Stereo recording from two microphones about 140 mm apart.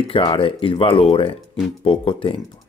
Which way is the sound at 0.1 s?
40° left (ahead or behind).